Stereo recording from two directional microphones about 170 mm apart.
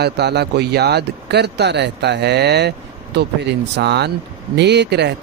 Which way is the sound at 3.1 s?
85° right.